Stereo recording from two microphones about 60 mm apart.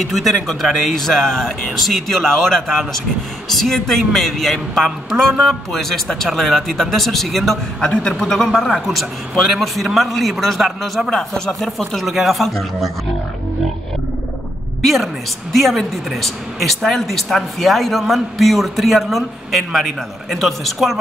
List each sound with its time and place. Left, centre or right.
0.1 s speech: centre
7.8 s speech: centre
11.1 s speech: centre
11.8 s speech: centre
15.5 s speech: centre